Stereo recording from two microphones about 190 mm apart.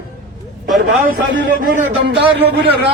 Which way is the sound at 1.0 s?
60° right (ahead or behind).